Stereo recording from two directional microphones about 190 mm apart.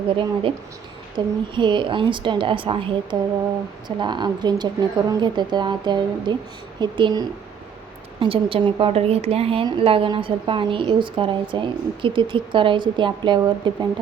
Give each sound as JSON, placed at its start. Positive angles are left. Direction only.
{"t": 1.1, "sound": "a woman's voice", "side_deg": -25}